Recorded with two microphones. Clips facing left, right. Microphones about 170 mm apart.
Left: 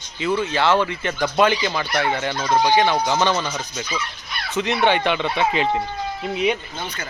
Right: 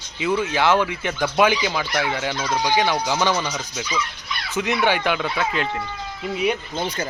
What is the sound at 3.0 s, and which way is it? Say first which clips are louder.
Speech: left 1 dB; 10° right (ahead or behind).